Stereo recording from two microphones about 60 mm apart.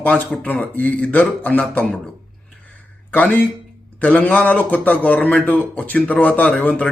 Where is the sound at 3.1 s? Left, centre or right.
Left.